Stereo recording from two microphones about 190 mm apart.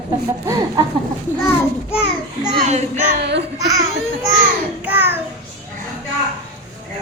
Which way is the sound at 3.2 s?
65° right (ahead or behind).